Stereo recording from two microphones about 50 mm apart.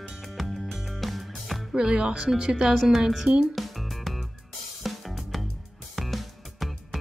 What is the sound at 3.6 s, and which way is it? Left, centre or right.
Music, centre.